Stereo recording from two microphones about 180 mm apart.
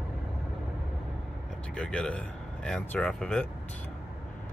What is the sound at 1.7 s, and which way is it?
Speech, 5° left (ahead or behind).